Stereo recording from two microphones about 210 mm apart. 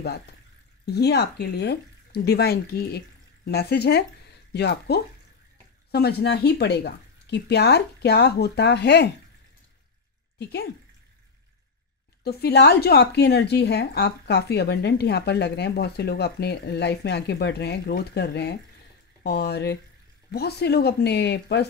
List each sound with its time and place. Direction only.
0.8 s speech: 50° left (ahead or behind)
10.4 s speech: 50° left (ahead or behind)
12.2 s speech: 50° left (ahead or behind)